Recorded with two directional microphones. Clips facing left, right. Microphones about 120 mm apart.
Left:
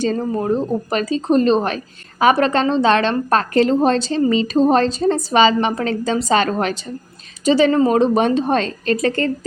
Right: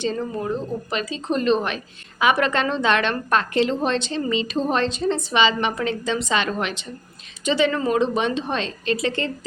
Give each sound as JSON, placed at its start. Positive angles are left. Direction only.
{"t": 0.0, "sound": "a woman's voice", "side_deg": 40}